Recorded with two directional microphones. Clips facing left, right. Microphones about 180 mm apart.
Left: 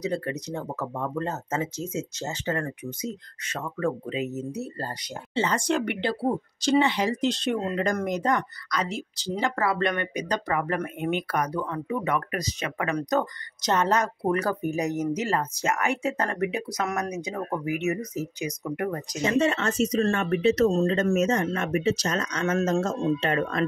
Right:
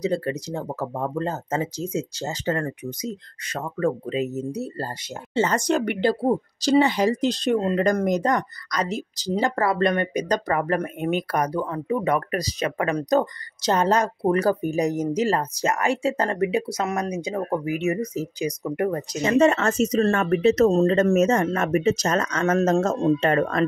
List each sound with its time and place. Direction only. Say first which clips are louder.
0.0 s speech: right 4 dB; 30° right (ahead or behind)
5.3 s speech: right 4 dB; 45° right (ahead or behind)
19.3 s speech: right 6 dB; 45° right (ahead or behind)